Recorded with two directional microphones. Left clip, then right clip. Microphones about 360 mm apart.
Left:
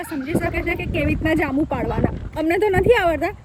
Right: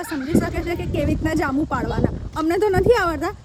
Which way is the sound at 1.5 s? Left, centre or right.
Centre.